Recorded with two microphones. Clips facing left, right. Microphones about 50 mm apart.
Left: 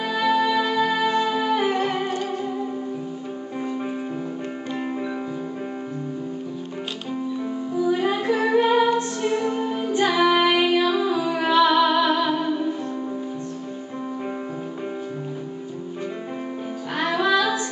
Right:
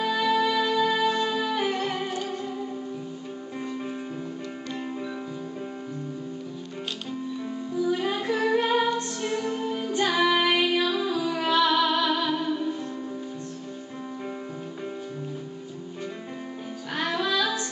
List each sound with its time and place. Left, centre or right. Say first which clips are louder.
0.0 s music: left 3 dB; centre
7.7 s music: left 4 dB; centre
16.9 s music: left 6 dB; centre